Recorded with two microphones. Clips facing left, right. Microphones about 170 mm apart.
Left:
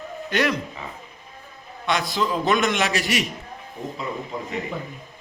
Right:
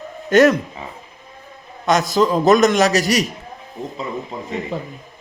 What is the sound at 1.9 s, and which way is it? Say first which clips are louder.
A man's voice: right 7 dB; 45° right (ahead or behind).